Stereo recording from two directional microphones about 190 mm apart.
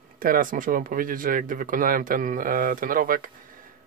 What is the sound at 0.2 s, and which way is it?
Speech, 45° right (ahead or behind).